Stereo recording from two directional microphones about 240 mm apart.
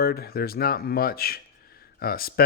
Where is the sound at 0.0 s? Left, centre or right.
Left.